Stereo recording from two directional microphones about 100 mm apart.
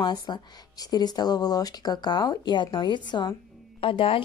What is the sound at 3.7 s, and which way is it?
Speech, 65° left (ahead or behind).